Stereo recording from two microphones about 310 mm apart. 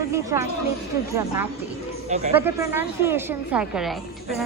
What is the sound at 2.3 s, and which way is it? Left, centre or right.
A woman's voice, centre.